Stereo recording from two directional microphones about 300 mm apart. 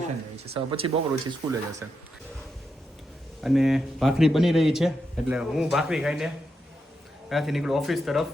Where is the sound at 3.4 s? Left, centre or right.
Centre.